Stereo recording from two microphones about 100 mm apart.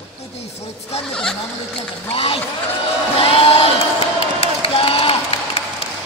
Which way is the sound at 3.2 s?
70° left (ahead or behind).